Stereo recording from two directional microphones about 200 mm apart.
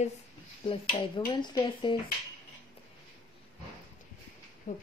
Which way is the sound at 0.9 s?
25° left (ahead or behind).